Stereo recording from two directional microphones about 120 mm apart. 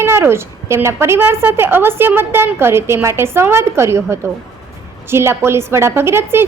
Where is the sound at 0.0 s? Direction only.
20° right (ahead or behind).